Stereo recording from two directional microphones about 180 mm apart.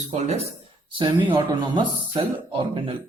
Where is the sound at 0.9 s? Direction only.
25° right (ahead or behind).